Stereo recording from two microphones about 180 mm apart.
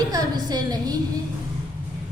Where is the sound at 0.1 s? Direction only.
20° right (ahead or behind).